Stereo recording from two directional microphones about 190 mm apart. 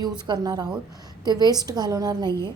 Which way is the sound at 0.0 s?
20° right (ahead or behind).